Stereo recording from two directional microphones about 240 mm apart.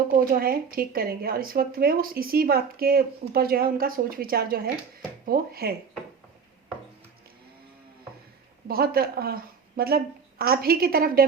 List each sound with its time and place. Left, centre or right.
0.1 s speech: right
8.6 s speech: right